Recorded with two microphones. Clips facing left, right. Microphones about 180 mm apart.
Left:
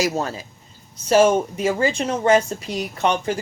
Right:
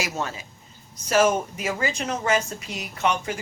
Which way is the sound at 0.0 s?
35° left (ahead or behind).